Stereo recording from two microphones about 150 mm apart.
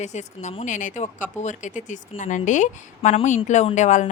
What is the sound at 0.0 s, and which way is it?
A woman's voice, 50° left (ahead or behind).